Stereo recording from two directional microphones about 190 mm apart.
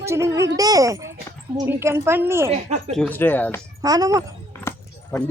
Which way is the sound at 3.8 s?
20° right (ahead or behind).